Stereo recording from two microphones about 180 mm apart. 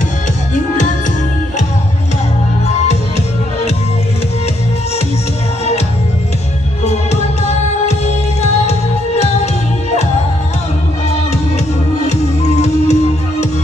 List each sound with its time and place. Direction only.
6.8 s music: 35° left (ahead or behind)
12.0 s music: 40° left (ahead or behind)